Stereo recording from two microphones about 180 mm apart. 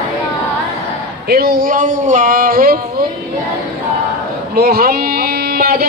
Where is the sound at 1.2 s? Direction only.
60° right (ahead or behind).